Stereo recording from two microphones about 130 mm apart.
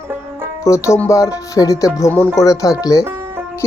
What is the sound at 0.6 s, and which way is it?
Speech, 25° left (ahead or behind).